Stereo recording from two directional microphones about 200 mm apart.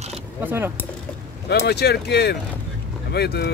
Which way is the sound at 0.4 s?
10° right (ahead or behind).